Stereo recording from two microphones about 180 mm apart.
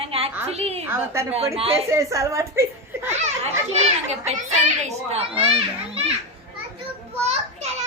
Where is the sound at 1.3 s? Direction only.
35° right (ahead or behind).